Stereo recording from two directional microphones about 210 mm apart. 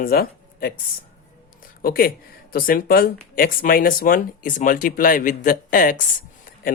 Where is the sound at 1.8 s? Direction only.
45° left (ahead or behind).